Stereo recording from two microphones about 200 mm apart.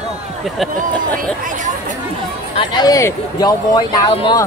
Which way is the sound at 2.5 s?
25° left (ahead or behind).